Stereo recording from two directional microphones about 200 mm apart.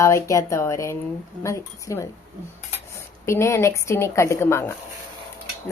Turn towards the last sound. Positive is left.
turn(degrees=10)  # may be behind; listen again after turning